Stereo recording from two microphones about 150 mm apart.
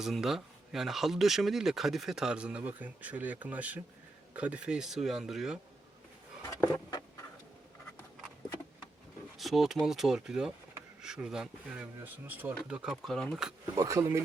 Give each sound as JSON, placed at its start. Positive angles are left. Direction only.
{"t": 0.0, "sound": "speech", "side_deg": 0}
{"t": 6.5, "sound": "a sound", "side_deg": 20}
{"t": 9.4, "sound": "speech", "side_deg": 0}
{"t": 13.7, "sound": "speech", "side_deg": -20}